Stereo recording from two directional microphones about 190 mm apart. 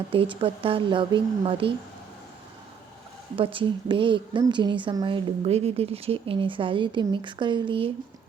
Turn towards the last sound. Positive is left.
turn(degrees=-25)  # may be behind; listen again after turning